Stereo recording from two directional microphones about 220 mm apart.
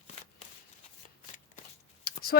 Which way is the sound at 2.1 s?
45° left (ahead or behind).